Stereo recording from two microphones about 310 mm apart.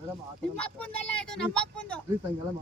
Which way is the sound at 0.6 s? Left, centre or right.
Centre.